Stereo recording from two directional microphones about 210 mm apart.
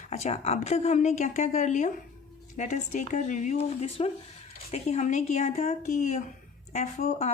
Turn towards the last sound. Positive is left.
turn(degrees=35)  # may be behind; listen again after turning